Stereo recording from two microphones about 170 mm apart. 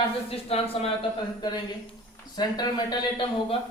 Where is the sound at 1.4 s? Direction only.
25° left (ahead or behind).